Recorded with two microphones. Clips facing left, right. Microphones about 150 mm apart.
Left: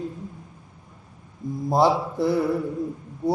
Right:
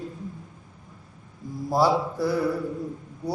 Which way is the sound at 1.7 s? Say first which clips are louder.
Left 2 dB; 25° left (ahead or behind).